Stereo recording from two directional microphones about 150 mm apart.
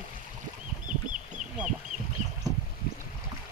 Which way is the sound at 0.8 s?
55° right (ahead or behind).